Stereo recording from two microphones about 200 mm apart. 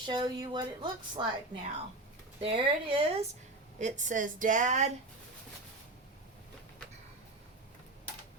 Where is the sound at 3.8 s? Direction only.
40° right (ahead or behind).